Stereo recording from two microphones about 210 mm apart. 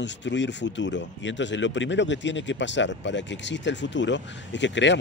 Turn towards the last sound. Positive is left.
turn(degrees=60)  # may be behind; listen again after turning